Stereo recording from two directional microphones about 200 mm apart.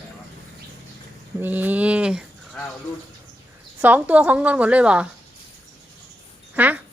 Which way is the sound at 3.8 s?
10° right (ahead or behind).